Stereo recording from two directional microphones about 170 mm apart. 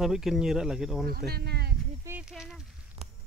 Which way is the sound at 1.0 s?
65° right (ahead or behind).